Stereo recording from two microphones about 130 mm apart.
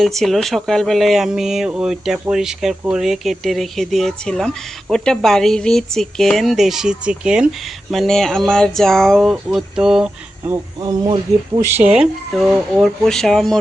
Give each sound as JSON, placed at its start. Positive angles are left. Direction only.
{"t": 0.0, "sound": "speech", "side_deg": 0}
{"t": 10.8, "sound": "speech", "side_deg": -30}
{"t": 11.6, "sound": "speech", "side_deg": -15}